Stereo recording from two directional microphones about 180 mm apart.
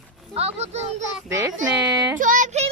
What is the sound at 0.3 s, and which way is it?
Speech, 35° right (ahead or behind).